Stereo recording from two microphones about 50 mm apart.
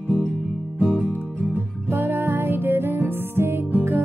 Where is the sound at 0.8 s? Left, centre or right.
Centre.